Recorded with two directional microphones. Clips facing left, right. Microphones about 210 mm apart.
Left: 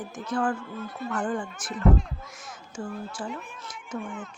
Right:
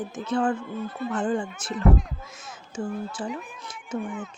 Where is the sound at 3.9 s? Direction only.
Centre (ahead or behind).